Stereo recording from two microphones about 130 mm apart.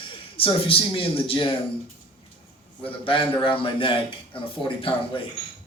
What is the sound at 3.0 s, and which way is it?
A man's voice, 45° left (ahead or behind).